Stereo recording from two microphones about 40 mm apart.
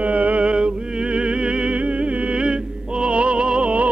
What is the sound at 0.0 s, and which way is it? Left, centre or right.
Music, right.